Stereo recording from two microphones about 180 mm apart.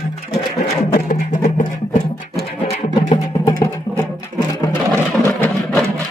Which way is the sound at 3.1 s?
20° left (ahead or behind).